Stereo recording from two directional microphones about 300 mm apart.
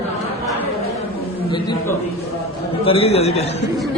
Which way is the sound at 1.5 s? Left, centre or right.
Centre.